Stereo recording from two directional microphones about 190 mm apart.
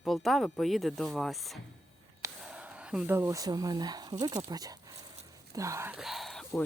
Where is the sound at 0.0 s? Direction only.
Centre (ahead or behind).